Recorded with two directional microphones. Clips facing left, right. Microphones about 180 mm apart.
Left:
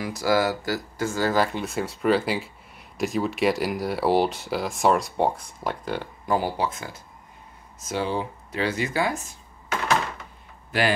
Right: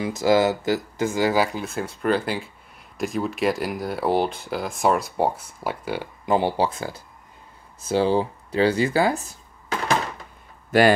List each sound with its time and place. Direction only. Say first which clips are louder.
0.0 s speech: right 4 dB; 20° right (ahead or behind)
6.2 s speech: right 4 dB; 25° right (ahead or behind)